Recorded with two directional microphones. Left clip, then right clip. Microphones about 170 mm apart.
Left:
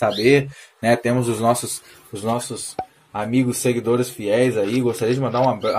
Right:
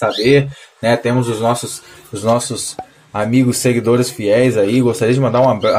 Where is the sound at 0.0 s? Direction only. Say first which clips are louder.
Right 4 dB; 35° left (ahead or behind).